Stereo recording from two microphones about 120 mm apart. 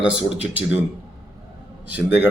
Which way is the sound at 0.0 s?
10° right (ahead or behind).